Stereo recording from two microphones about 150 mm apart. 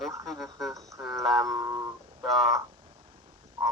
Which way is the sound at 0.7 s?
20° right (ahead or behind).